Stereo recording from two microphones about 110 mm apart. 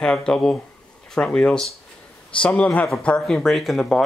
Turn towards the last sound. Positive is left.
turn(degrees=5)  # may be behind; listen again after turning